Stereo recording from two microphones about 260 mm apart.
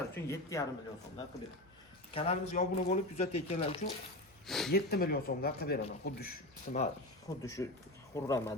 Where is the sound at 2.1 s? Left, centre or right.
Left.